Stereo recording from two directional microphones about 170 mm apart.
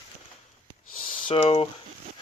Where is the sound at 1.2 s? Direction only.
35° left (ahead or behind).